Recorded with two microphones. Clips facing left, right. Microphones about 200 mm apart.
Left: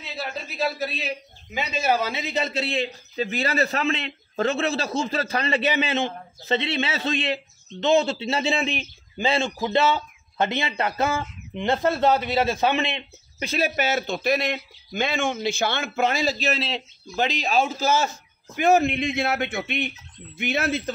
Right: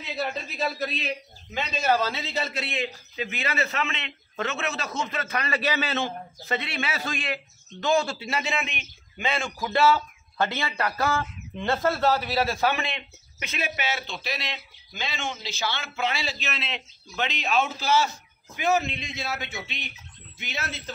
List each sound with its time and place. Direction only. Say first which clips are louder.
0.2 s a man's voice: left 1 dB; centre (ahead or behind); by 20.9 s 55° left (ahead or behind)